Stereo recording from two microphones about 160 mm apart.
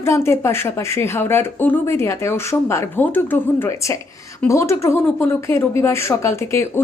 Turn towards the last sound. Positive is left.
turn(degrees=15)  # may be behind; listen again after turning